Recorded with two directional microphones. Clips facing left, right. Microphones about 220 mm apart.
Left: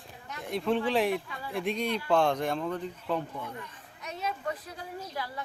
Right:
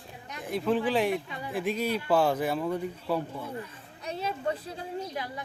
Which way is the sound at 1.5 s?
Centre (ahead or behind).